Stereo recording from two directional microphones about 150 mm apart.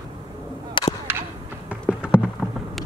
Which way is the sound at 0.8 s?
35° left (ahead or behind).